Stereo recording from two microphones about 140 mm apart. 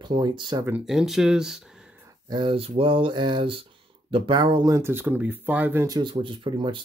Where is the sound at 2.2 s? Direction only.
35° right (ahead or behind).